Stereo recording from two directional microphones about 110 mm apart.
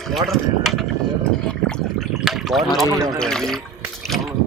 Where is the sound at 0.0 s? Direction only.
Centre (ahead or behind).